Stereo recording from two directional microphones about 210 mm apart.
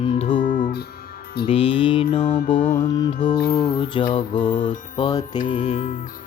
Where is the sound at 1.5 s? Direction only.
25° left (ahead or behind).